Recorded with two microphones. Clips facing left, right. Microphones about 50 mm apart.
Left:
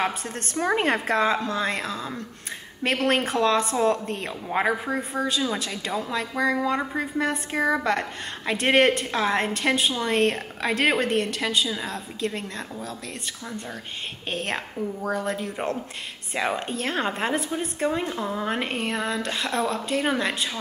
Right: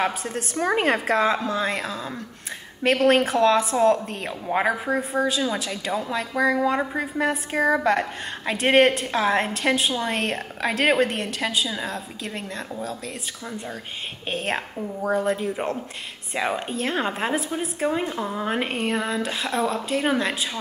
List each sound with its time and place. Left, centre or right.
0.0 s a woman's voice: centre
14.3 s a woman's voice: centre
15.0 s speech: centre
15.2 s a woman's voice: centre